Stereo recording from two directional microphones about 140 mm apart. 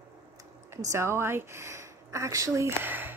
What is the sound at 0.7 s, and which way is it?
Speech, 20° right (ahead or behind).